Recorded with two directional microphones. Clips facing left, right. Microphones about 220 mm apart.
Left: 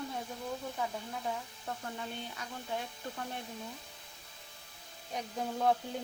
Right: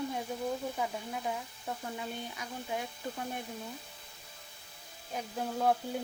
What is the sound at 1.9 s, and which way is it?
Speech, 10° right (ahead or behind).